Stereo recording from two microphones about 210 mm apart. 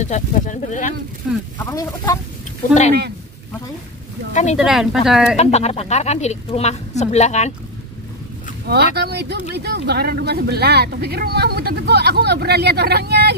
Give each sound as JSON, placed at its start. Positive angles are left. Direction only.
{"t": 0.0, "sound": "a woman's voice", "side_deg": 35}
{"t": 1.3, "sound": "speech", "side_deg": 0}
{"t": 1.6, "sound": "speech", "side_deg": 15}
{"t": 4.3, "sound": "a woman's voice", "side_deg": 35}
{"t": 4.6, "sound": "speech", "side_deg": 0}
{"t": 5.3, "sound": "a woman's voice", "side_deg": 30}
{"t": 8.6, "sound": "speech", "side_deg": -50}